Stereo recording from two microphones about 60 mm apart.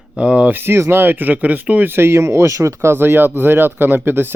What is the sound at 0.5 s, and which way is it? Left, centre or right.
Speech, right.